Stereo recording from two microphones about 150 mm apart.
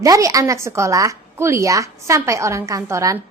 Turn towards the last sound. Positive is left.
turn(degrees=-20)  # may be behind; listen again after turning